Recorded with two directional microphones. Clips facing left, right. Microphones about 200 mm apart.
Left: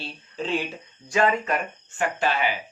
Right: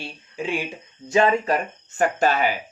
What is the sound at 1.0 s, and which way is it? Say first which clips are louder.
Speech: right 4 dB; 25° right (ahead or behind).